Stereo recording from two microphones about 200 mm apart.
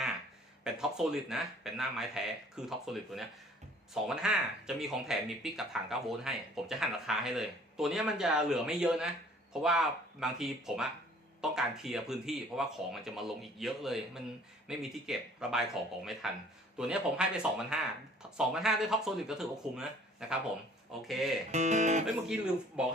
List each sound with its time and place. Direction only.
0.6 s speech: 5° right (ahead or behind)
21.5 s guitar: 35° right (ahead or behind)
22.8 s speech: 5° right (ahead or behind)